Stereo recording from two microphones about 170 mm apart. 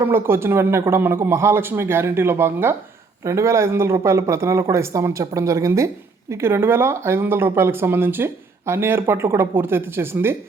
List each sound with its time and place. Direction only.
0.0 s speech: 15° right (ahead or behind)